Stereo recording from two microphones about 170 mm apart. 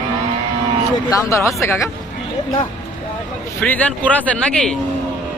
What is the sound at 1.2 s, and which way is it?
Speech, 15° left (ahead or behind).